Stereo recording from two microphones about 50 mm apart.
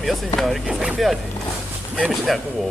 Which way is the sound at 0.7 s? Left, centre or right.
Centre.